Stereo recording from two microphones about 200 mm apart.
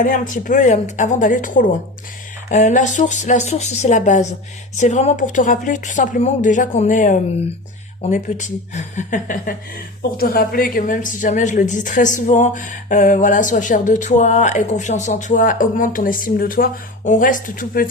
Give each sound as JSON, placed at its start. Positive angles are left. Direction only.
{"t": 0.0, "sound": "speech", "side_deg": 40}